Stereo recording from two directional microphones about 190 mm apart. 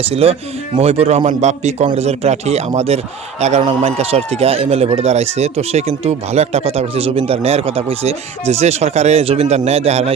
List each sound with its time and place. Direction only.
0.0 s speech: 30° right (ahead or behind)